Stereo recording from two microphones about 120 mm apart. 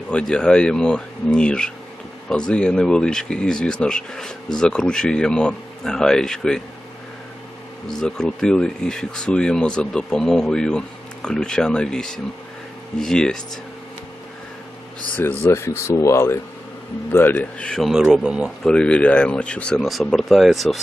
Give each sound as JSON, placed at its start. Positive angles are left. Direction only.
{"t": 0.1, "sound": "speech", "side_deg": 10}
{"t": 7.9, "sound": "speech", "side_deg": 5}
{"t": 15.1, "sound": "speech", "side_deg": 15}
{"t": 18.6, "sound": "speech", "side_deg": 10}